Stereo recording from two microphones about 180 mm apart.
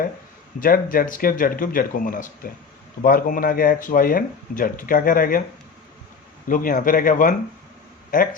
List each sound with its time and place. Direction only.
0.6 s speech: 50° left (ahead or behind)
6.5 s speech: 50° left (ahead or behind)